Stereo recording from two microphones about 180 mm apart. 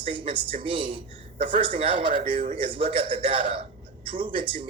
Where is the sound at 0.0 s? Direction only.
30° right (ahead or behind).